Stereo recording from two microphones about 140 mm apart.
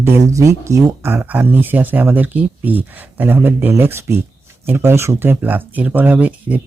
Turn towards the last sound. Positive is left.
turn(degrees=-10)  # may be behind; listen again after turning